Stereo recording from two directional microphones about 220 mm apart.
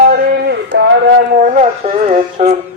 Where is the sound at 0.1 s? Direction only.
45° right (ahead or behind).